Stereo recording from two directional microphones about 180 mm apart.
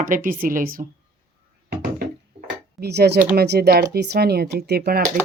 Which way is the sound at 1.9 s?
60° right (ahead or behind).